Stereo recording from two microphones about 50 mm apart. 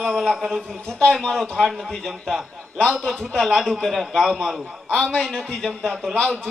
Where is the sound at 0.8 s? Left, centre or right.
Centre.